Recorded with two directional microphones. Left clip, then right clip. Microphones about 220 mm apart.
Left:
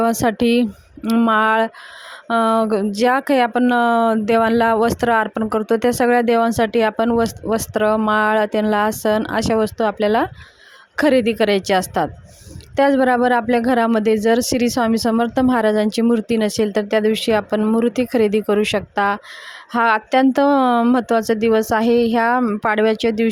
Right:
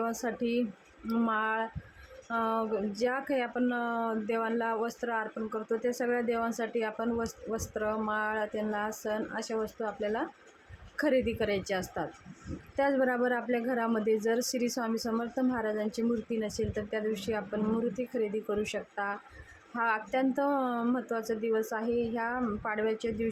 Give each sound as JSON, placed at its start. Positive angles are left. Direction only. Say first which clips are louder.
{"t": 0.0, "sound": "speech", "louder": "left 16 dB", "side_deg": 45}